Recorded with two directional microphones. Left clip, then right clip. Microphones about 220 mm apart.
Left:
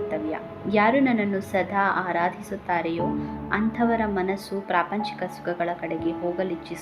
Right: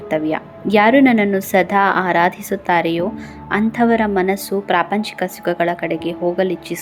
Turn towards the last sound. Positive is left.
turn(degrees=-30)  # may be behind; listen again after turning